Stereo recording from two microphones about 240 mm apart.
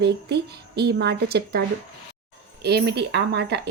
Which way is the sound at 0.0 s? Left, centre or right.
Right.